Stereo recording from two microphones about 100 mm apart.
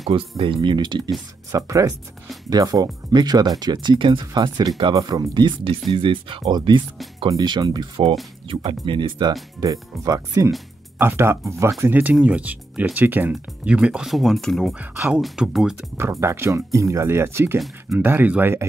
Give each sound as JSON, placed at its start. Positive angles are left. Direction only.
{"t": 0.4, "sound": "speech", "side_deg": -55}
{"t": 1.5, "sound": "speech", "side_deg": -35}
{"t": 4.3, "sound": "speech", "side_deg": -45}
{"t": 5.9, "sound": "speech", "side_deg": -60}
{"t": 6.4, "sound": "speech", "side_deg": -50}
{"t": 9.6, "sound": "speech", "side_deg": -40}
{"t": 11.0, "sound": "speech", "side_deg": -25}
{"t": 14.0, "sound": "speech", "side_deg": 0}
{"t": 16.0, "sound": "speech", "side_deg": -30}